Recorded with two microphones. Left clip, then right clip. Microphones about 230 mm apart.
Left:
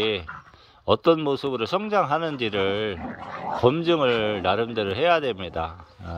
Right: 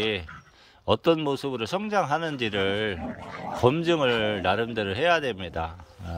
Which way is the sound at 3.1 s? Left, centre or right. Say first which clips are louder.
Left 4 dB; right.